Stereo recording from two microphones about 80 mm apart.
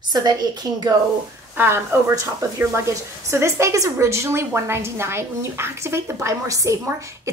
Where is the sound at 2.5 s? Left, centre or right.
Right.